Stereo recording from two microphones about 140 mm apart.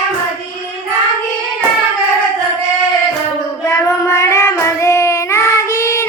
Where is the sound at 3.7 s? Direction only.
20° left (ahead or behind).